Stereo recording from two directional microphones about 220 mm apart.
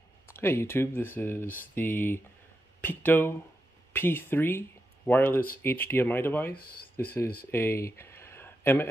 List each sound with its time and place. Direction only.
0.3 s speech: 10° left (ahead or behind)
6.5 s speech: 40° left (ahead or behind)
7.5 s a sound: 10° left (ahead or behind)